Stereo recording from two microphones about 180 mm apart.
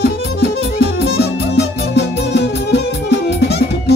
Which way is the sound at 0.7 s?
60° left (ahead or behind).